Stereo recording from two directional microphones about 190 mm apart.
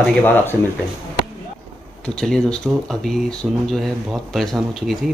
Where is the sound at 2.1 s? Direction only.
5° left (ahead or behind).